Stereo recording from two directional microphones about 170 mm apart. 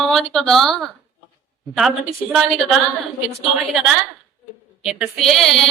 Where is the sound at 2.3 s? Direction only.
Centre (ahead or behind).